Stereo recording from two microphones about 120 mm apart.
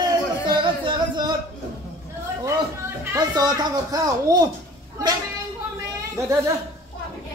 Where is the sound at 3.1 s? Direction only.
35° right (ahead or behind).